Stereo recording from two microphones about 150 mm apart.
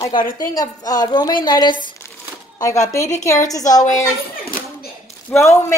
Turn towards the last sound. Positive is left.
turn(degrees=20)  # may be behind; listen again after turning